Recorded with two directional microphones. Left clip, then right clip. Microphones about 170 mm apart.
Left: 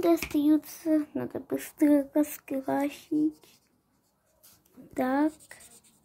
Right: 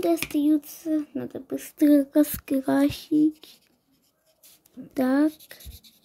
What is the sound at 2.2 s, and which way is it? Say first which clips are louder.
Speech: right 6 dB; 60° right (ahead or behind).